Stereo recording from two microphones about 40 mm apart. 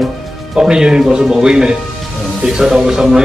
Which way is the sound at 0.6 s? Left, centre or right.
Centre.